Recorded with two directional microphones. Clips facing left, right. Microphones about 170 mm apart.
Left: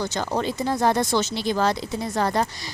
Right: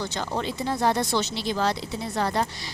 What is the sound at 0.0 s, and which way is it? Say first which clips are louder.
Speech: left 4 dB; 45° left (ahead or behind).